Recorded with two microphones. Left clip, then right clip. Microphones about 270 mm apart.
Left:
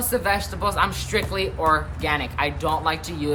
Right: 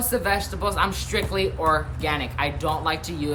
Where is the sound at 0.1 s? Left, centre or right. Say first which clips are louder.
Left 1 dB; centre.